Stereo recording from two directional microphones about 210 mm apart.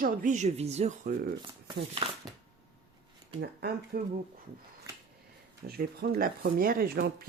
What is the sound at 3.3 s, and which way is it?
Speech, 50° right (ahead or behind).